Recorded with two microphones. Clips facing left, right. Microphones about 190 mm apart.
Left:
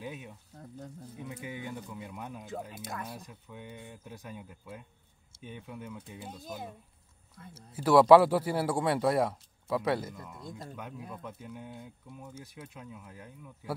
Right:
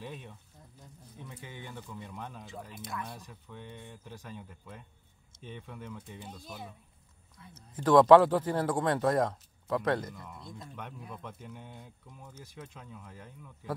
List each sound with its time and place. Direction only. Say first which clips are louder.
0.0 s speech: left 2 dB; 5° left (ahead or behind)
1.4 s a man's voice: left 5 dB; 10° left (ahead or behind)
2.5 s speech: left 2 dB; 45° left (ahead or behind)
3.1 s a man's voice: left 2 dB; 5° left (ahead or behind)
7.5 s a man's voice: even; 10° left (ahead or behind)